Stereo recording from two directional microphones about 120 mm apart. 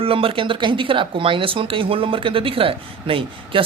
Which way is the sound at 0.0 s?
50° right (ahead or behind).